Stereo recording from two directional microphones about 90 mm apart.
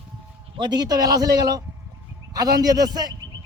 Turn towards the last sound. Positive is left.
turn(degrees=-50)  # may be behind; listen again after turning